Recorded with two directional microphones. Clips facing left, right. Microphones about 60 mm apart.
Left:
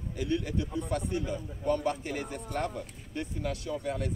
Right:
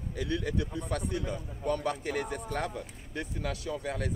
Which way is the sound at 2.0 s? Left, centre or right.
Right.